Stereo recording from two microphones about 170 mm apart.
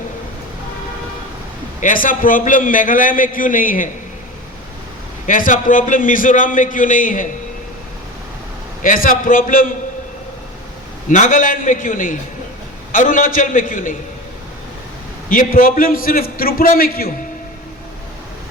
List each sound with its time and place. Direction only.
1.8 s a man's voice: 50° left (ahead or behind)
5.2 s a man's voice: 50° left (ahead or behind)
8.8 s a man's voice: 55° left (ahead or behind)
11.1 s a man's voice: 50° left (ahead or behind)
15.3 s a man's voice: 55° left (ahead or behind)